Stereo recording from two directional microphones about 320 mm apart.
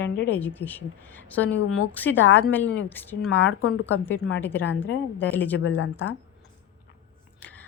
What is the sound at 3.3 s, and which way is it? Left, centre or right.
Speech, left.